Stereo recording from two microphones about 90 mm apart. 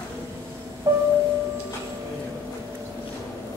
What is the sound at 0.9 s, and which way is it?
Music, 35° right (ahead or behind).